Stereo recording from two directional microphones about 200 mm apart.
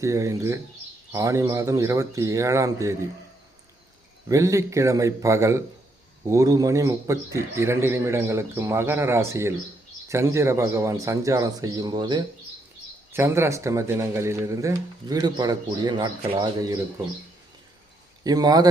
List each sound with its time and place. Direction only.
0.0 s speech: 15° right (ahead or behind)
4.3 s speech: 15° right (ahead or behind)
18.2 s speech: 20° right (ahead or behind)